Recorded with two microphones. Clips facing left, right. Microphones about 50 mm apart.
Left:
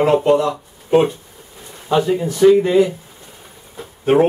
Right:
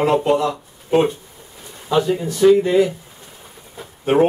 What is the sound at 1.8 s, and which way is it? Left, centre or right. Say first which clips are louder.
Speech: left 2 dB; left.